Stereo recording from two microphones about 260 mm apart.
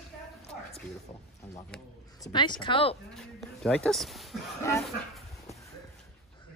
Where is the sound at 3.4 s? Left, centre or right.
Centre.